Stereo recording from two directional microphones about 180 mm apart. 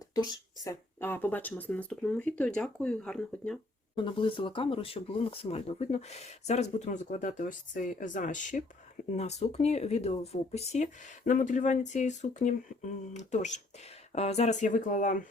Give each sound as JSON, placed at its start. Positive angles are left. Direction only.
{"t": 0.1, "sound": "speech", "side_deg": 20}
{"t": 3.9, "sound": "speech", "side_deg": 30}